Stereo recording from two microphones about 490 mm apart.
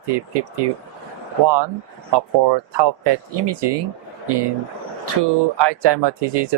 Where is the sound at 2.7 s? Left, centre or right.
Right.